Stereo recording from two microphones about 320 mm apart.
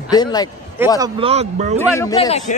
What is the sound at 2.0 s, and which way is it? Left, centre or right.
Speech, centre.